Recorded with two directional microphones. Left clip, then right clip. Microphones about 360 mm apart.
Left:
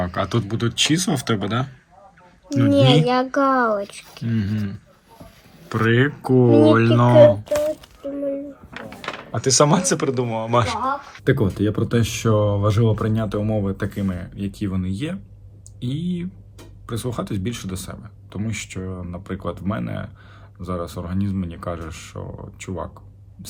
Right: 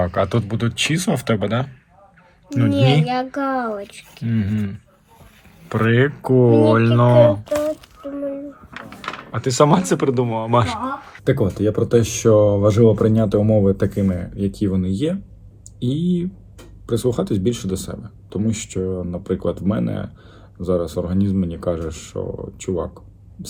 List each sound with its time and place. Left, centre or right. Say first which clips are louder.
0.0 s speech: right 4 dB; centre
2.7 s speech: left 3 dB; left
4.3 s speech: right 2 dB; centre
6.7 s a sound: left 1 dB; centre
11.2 s speech: right 3 dB; centre